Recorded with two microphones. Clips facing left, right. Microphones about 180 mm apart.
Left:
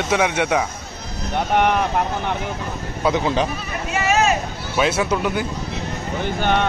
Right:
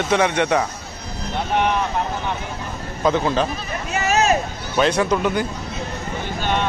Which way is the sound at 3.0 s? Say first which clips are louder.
Right 1 dB; 15° left (ahead or behind).